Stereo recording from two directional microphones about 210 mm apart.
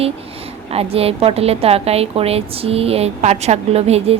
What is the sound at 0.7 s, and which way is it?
A woman's voice, 30° right (ahead or behind).